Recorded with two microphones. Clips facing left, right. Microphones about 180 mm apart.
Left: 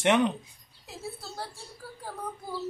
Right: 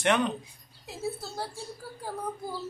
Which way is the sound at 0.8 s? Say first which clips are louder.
Right 5 dB; centre (ahead or behind).